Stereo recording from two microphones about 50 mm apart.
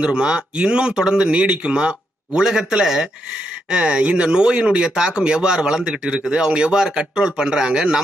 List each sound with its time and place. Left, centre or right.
0.0 s speech: centre